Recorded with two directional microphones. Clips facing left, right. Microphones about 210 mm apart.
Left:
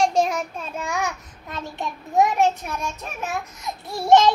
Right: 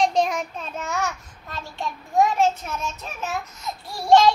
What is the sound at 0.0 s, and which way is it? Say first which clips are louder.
Child singing: left 1 dB; 5° left (ahead or behind).